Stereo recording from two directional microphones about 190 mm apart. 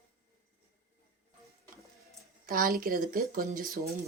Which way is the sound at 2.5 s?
50° right (ahead or behind).